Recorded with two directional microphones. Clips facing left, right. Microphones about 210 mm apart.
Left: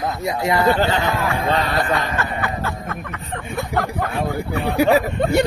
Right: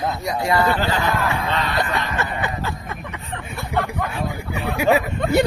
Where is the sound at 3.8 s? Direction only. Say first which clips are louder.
Left 3 dB; 35° left (ahead or behind).